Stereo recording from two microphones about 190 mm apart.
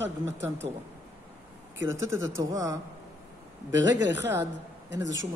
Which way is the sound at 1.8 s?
15° right (ahead or behind).